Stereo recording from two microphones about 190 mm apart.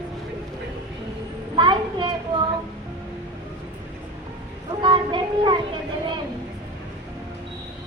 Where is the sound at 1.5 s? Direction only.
25° right (ahead or behind).